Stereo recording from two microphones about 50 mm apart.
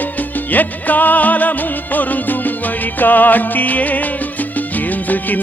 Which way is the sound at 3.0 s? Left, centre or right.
Left.